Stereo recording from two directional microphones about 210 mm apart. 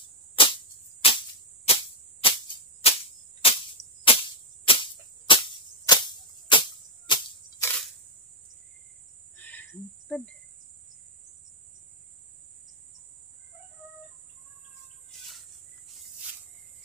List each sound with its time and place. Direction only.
0.4 s insect: 25° left (ahead or behind)
1.7 s a sound: 25° left (ahead or behind)
2.8 s insect: 30° left (ahead or behind)
3.4 s cricket: 25° left (ahead or behind)
4.0 s insect: 25° left (ahead or behind)
7.6 s camera: 5° left (ahead or behind)
9.4 s a sound: 10° left (ahead or behind)